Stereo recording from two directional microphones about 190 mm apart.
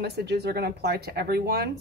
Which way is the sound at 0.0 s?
60° right (ahead or behind).